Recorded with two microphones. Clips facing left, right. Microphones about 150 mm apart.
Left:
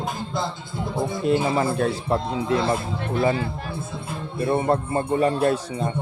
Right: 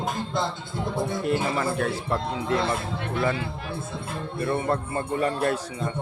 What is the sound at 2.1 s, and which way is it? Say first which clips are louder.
Speech: left 5 dB; 25° left (ahead or behind).